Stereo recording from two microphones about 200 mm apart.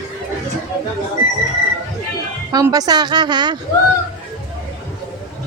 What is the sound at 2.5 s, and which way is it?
A woman's voice, 20° right (ahead or behind).